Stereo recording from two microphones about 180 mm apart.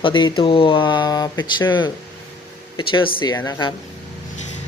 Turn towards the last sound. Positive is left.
turn(degrees=20)  # may be behind; listen again after turning